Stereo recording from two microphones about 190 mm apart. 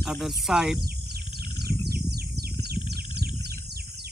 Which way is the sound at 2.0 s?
60° right (ahead or behind).